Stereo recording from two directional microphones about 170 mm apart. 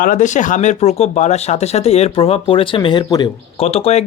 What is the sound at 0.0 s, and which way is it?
Speech, 50° left (ahead or behind).